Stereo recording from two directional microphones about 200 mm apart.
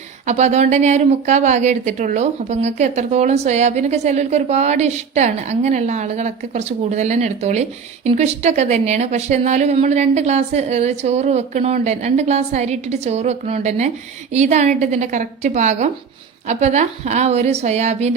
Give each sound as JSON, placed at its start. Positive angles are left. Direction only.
{"t": 0.3, "sound": "a woman's voice", "side_deg": -35}